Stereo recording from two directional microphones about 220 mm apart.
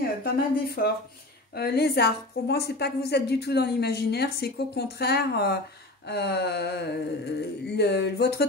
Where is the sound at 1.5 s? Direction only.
45° left (ahead or behind).